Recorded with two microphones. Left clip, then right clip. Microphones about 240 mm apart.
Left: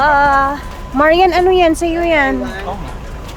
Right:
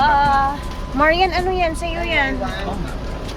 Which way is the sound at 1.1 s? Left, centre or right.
Left.